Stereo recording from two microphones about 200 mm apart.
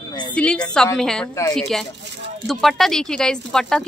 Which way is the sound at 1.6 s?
Centre (ahead or behind).